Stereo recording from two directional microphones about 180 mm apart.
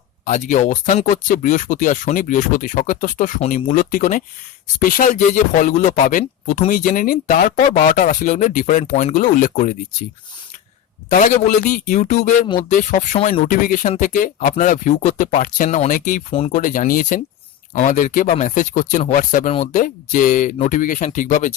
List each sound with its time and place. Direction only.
0.3 s speech: 40° left (ahead or behind)
11.1 s speech: 45° left (ahead or behind)